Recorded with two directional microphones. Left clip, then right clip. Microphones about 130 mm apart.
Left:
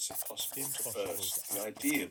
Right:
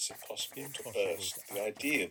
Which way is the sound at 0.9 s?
45° right (ahead or behind).